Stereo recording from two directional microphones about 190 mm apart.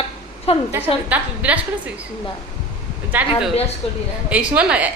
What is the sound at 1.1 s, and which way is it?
Speech, 10° right (ahead or behind).